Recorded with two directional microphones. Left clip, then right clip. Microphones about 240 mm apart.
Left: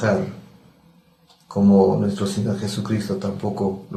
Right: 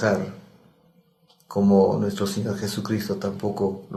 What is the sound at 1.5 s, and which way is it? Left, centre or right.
Speech, right.